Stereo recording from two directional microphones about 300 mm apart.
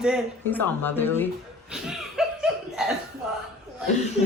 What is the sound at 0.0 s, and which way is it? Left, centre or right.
Speech, centre.